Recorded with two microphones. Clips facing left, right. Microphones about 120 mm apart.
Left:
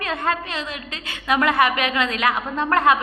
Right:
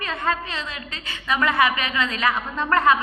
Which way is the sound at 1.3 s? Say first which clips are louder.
Left 2 dB; 65° left (ahead or behind).